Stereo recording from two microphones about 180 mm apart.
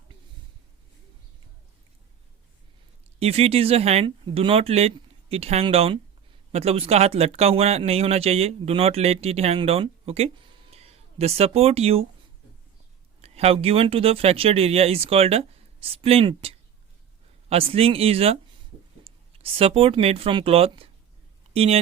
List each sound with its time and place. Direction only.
3.2 s speech: 35° right (ahead or behind)
13.2 s speech: 35° right (ahead or behind)